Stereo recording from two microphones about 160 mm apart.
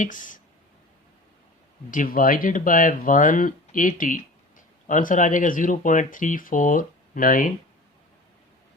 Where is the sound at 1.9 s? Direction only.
60° left (ahead or behind).